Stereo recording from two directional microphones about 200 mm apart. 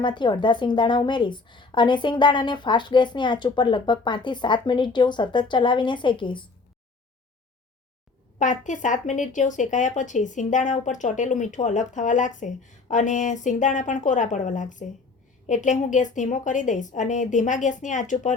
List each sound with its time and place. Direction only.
0.0 s a woman's voice: 25° left (ahead or behind)
8.4 s speech: 40° left (ahead or behind)